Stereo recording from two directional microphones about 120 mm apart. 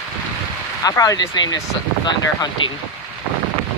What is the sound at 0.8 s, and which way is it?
Speech, 30° left (ahead or behind).